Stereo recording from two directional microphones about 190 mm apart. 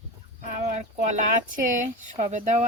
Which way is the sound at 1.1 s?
40° right (ahead or behind).